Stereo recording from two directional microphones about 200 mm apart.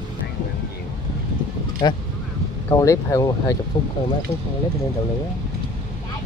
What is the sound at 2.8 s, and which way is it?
Speech, 15° left (ahead or behind).